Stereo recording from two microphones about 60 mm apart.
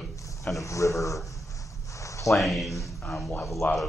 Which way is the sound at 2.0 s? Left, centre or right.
Left.